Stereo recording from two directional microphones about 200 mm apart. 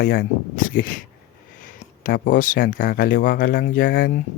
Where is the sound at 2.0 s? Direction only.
45° left (ahead or behind).